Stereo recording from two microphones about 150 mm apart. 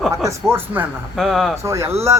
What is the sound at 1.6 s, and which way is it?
Speech, 20° right (ahead or behind).